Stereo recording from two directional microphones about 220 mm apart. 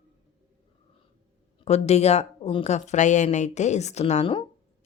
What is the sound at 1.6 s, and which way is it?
A woman's voice, 30° left (ahead or behind).